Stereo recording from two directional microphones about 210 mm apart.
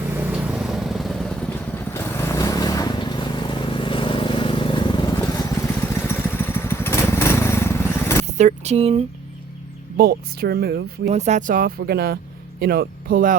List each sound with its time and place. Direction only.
0.1 s vehicle: 5° right (ahead or behind); by 5.1 s 20° left (ahead or behind)
5.9 s lawn mower: 10° left (ahead or behind)
8.4 s speech: 35° right (ahead or behind)
10.0 s speech: 45° right (ahead or behind)
11.1 s speech: 35° right (ahead or behind)